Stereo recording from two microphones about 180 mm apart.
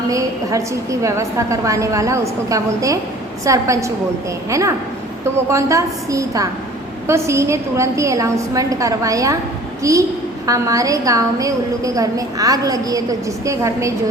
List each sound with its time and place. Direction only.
0.1 s a woman's voice: 20° right (ahead or behind)